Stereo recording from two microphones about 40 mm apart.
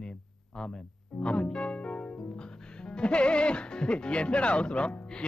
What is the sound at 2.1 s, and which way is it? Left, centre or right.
Music, centre.